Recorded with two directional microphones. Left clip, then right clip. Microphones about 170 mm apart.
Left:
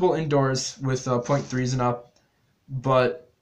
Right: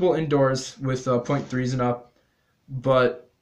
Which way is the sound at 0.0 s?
10° left (ahead or behind).